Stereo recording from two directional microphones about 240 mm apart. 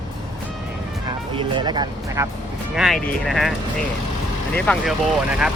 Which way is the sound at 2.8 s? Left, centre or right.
Centre.